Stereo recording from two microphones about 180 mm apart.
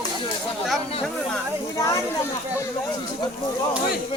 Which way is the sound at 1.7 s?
20° left (ahead or behind).